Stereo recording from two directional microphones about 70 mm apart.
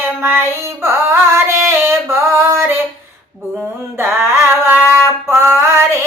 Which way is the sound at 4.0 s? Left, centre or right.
Right.